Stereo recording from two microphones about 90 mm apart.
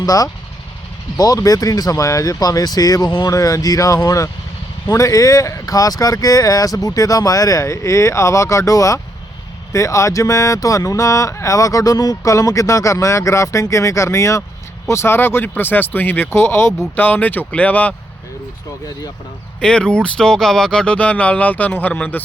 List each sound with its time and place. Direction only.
0.0 s speech: 40° left (ahead or behind); by 17.9 s 20° left (ahead or behind)
19.5 s speech: 10° left (ahead or behind)